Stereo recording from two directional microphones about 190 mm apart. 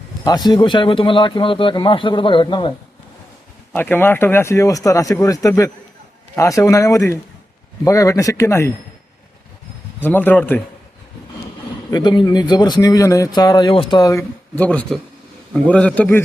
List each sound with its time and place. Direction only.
0.3 s speech: 20° left (ahead or behind)
3.7 s speech: 10° left (ahead or behind)
10.0 s speech: 10° left (ahead or behind)
11.9 s speech: 20° left (ahead or behind)